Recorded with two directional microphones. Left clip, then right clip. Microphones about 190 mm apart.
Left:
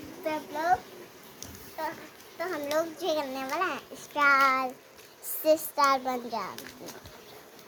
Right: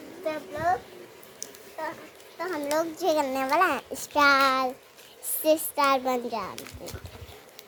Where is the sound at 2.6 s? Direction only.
45° right (ahead or behind).